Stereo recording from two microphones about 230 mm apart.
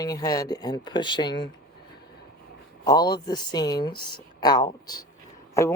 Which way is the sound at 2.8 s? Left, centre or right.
Centre.